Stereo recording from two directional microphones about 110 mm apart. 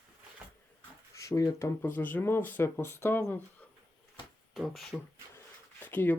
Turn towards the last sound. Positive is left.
turn(degrees=15)  # may be behind; listen again after turning